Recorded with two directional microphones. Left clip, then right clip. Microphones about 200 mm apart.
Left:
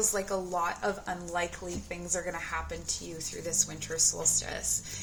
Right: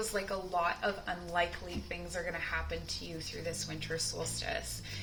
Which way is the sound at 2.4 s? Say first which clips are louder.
Left 2 dB; 50° left (ahead or behind).